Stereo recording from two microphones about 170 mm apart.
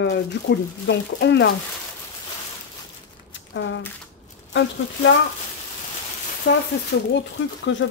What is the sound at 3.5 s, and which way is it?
Speech, 90° left.